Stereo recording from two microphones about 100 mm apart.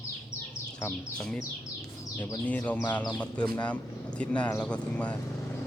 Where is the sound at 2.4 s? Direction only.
15° left (ahead or behind).